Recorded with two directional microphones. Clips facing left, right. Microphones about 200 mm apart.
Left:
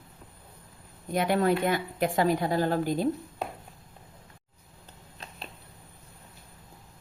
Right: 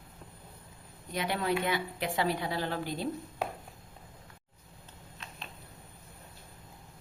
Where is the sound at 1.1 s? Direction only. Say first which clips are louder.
Left 7 dB; 50° left (ahead or behind).